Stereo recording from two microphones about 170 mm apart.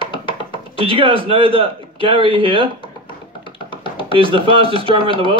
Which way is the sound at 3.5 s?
30° left (ahead or behind).